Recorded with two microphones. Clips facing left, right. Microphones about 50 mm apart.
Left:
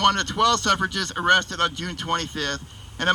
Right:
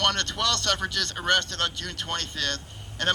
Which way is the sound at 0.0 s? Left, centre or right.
Left.